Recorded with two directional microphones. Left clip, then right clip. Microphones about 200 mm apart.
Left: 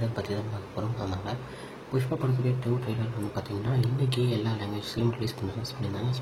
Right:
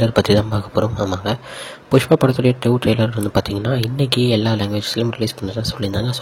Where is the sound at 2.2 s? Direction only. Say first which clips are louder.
Right 15 dB; 45° right (ahead or behind).